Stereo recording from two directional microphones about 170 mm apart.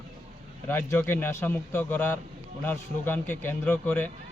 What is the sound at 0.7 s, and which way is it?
A man's voice, 10° left (ahead or behind).